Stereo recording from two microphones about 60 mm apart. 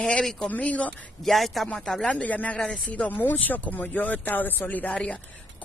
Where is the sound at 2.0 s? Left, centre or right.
Left.